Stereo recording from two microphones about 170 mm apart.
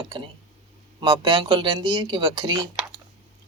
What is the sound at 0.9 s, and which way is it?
Speech, 25° right (ahead or behind).